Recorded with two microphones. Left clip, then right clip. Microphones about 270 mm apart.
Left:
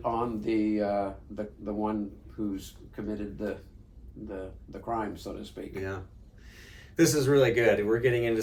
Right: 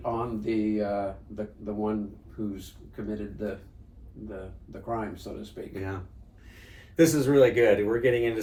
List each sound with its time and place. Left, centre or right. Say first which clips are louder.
0.0 s a man's voice: left 1 dB; centre
4.7 s a man's voice: even; centre
5.7 s speech: left 1 dB; centre